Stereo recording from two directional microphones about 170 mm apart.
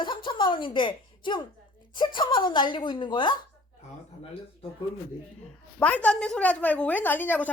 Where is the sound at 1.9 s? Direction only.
30° left (ahead or behind).